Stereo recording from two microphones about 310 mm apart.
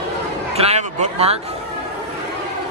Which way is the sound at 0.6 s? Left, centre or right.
Right.